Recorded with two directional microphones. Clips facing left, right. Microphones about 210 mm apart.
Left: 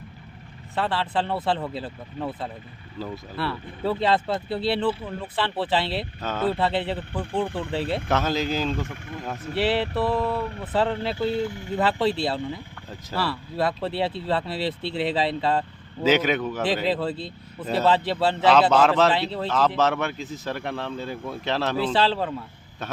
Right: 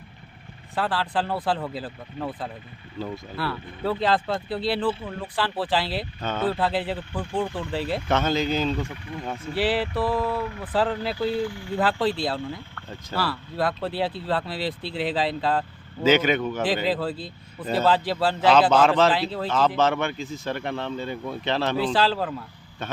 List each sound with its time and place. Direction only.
0.8 s a man's voice: 5° right (ahead or behind)
8.9 s speech: 45° left (ahead or behind)
9.6 s a man's voice: 5° right (ahead or behind)
11.4 s speech: 20° left (ahead or behind)
11.8 s a man's voice: centre (ahead or behind)